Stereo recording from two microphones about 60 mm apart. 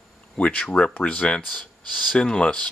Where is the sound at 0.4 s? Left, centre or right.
Left.